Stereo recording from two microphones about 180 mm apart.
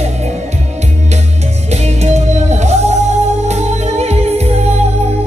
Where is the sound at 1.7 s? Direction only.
40° right (ahead or behind).